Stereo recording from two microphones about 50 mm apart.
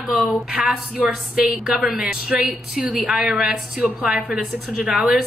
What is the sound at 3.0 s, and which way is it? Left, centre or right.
Speech, centre.